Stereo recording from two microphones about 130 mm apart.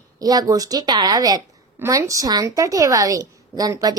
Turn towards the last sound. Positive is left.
turn(degrees=-30)  # may be behind; listen again after turning